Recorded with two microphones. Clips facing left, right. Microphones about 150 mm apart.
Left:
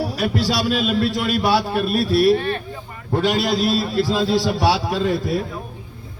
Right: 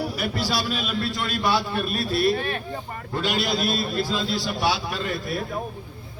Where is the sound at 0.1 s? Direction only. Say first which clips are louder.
Left 5 dB; 90° left.